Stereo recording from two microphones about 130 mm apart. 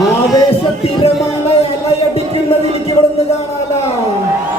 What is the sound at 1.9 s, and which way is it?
Music, 50° left (ahead or behind).